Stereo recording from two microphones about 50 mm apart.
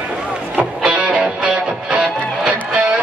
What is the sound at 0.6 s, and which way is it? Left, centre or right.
Music, right.